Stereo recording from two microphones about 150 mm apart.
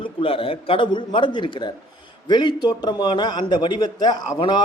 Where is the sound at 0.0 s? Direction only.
35° left (ahead or behind).